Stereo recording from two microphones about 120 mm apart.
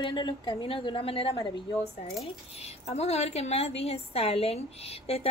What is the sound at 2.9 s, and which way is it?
A woman's voice, 60° left (ahead or behind).